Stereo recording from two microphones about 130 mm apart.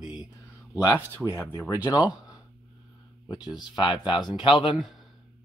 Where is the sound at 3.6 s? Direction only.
35° left (ahead or behind).